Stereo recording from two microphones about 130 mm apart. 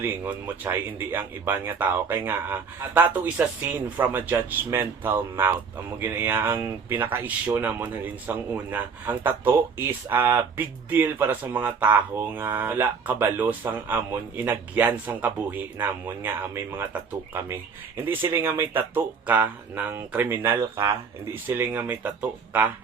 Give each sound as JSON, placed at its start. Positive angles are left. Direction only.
{"t": 0.0, "sound": "speech", "side_deg": -15}
{"t": 17.9, "sound": "speech", "side_deg": -15}